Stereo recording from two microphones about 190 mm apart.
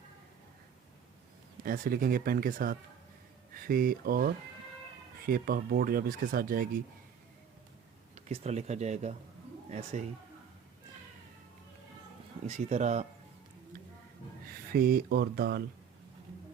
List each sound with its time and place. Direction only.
1.6 s speech: 50° right (ahead or behind)
8.1 s speech: 35° right (ahead or behind)
12.5 s speech: 35° right (ahead or behind)
14.7 s speech: 55° right (ahead or behind)